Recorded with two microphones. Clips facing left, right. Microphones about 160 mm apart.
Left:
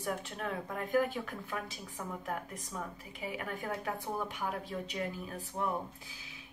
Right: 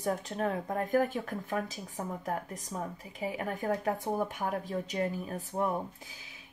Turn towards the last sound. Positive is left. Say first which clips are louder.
# right 5 dB
turn(degrees=-45)  # may be behind; listen again after turning